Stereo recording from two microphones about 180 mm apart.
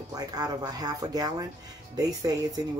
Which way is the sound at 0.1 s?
20° right (ahead or behind).